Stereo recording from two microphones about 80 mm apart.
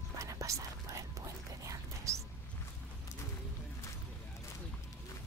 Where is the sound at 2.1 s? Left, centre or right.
Right.